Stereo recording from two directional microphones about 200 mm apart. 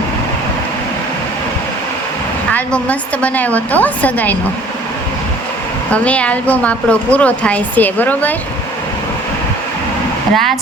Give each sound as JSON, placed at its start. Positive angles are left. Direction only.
{"t": 2.5, "sound": "a woman's voice", "side_deg": 5}
{"t": 5.9, "sound": "a woman's voice", "side_deg": 5}
{"t": 10.3, "sound": "a woman's voice", "side_deg": 0}